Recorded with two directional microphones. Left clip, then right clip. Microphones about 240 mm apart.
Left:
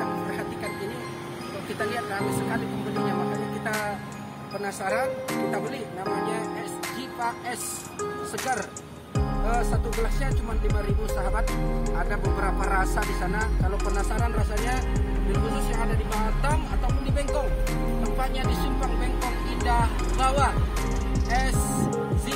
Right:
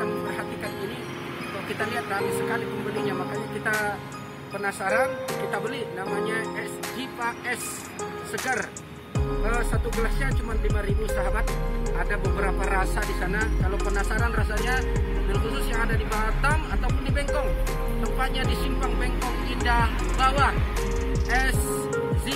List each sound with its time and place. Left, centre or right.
3.6 s music: centre
4.6 s speech: centre
9.1 s speech: centre
12.6 s music: centre
18.0 s music: centre